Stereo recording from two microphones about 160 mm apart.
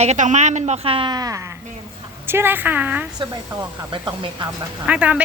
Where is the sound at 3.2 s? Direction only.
30° right (ahead or behind).